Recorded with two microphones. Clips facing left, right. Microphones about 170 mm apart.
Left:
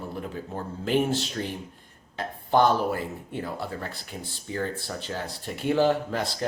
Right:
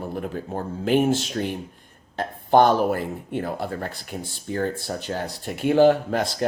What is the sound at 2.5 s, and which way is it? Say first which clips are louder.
Speech: right 5 dB; 60° right (ahead or behind).